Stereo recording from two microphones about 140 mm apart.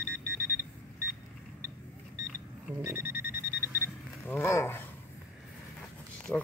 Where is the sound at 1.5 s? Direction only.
10° left (ahead or behind).